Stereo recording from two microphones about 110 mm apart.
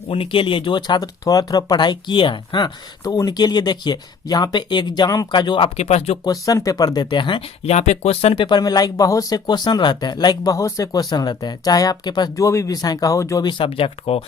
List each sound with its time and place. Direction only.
0.1 s speech: 55° left (ahead or behind); by 6.1 s 80° left
6.2 s speech: 30° left (ahead or behind); by 7.4 s 45° left (ahead or behind)
7.6 s speech: 80° left; by 8.4 s 65° left (ahead or behind)
8.4 s speech: 40° left (ahead or behind)
12.5 s speech: 30° left (ahead or behind)
13.5 s speech: 55° left (ahead or behind)